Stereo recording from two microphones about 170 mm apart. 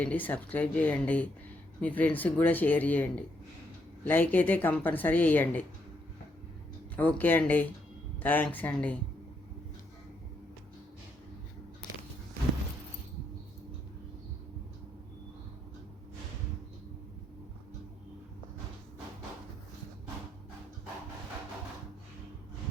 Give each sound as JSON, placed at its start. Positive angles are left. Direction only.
{"t": 0.0, "sound": "a woman's voice", "side_deg": 10}
{"t": 6.9, "sound": "a woman's voice", "side_deg": 10}